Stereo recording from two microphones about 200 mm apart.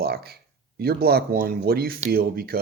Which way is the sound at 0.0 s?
50° right (ahead or behind).